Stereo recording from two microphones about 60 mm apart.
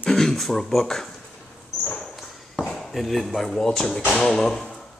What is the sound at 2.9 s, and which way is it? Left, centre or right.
Speech, centre.